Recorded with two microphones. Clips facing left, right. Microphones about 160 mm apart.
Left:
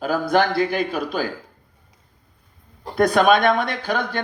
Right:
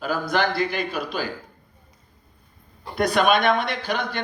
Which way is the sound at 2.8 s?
50° left (ahead or behind).